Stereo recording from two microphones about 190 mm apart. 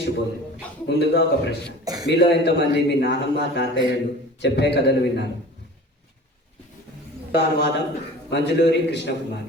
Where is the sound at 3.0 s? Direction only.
65° left (ahead or behind).